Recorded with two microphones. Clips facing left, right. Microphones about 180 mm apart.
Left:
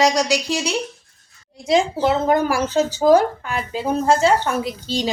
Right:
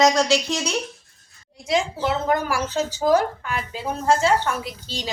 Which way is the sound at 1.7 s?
25° left (ahead or behind).